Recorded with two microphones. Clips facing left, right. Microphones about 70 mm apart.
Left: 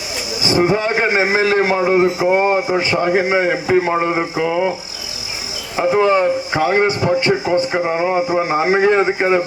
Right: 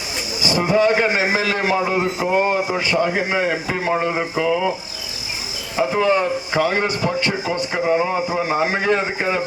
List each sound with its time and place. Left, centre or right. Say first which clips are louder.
0.4 s a man's voice: left 1 dB; left
5.7 s a man's voice: left 4 dB; left